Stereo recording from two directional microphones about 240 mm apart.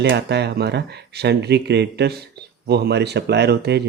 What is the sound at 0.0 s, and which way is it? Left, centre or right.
Speech, right.